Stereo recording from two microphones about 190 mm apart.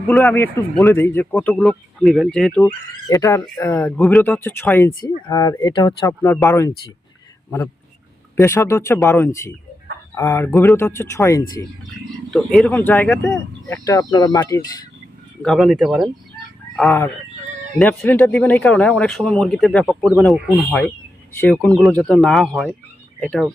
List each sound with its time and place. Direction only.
0.1 s speech: 10° left (ahead or behind)
3.1 s speech: 15° left (ahead or behind)
8.4 s speech: 15° left (ahead or behind)
12.3 s speech: 5° left (ahead or behind)
15.4 s speech: centre (ahead or behind)